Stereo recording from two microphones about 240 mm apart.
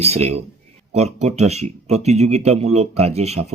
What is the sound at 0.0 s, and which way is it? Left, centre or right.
Speech, right.